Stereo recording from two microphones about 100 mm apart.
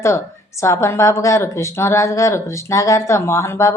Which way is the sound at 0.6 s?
30° left (ahead or behind).